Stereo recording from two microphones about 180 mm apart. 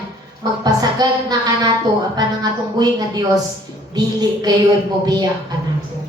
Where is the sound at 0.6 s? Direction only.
20° right (ahead or behind).